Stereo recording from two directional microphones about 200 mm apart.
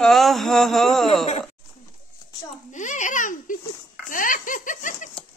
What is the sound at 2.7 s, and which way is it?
Speech, 40° left (ahead or behind).